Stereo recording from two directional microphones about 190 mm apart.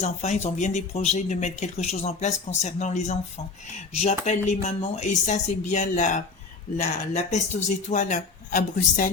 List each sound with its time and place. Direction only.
0.0 s speech: 35° left (ahead or behind)